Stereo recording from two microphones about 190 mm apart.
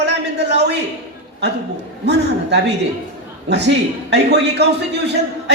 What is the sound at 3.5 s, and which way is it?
A man's voice, 65° right (ahead or behind).